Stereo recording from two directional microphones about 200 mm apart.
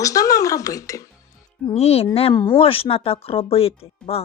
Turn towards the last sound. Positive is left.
turn(degrees=30)  # may be behind; listen again after turning